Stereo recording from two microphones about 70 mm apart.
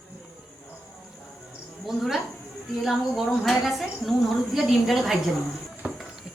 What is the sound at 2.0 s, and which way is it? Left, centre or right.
Speech, centre.